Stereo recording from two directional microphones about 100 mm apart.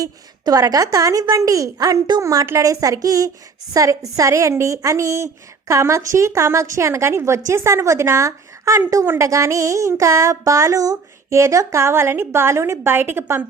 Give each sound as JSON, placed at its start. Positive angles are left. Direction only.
{"t": 0.0, "sound": "a woman's voice", "side_deg": -35}